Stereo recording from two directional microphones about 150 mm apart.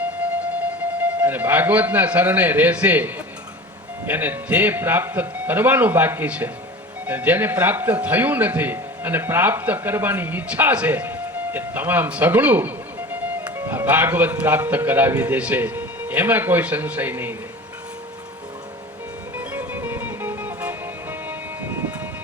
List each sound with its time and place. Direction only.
0.9 s a man's voice: 10° right (ahead or behind)
19.4 s music: 15° right (ahead or behind)